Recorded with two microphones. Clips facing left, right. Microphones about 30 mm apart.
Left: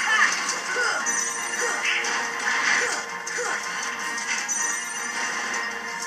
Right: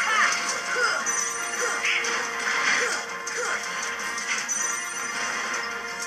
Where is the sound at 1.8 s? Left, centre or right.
Centre.